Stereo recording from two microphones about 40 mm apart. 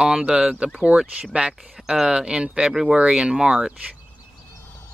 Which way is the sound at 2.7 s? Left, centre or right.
Centre.